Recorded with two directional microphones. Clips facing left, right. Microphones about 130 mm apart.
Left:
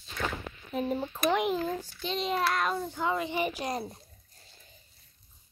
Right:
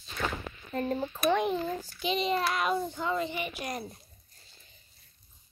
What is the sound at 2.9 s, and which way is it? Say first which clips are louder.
Speech: left 1 dB; 10° left (ahead or behind).